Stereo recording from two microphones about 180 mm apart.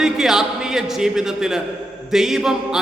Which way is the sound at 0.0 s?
Centre (ahead or behind).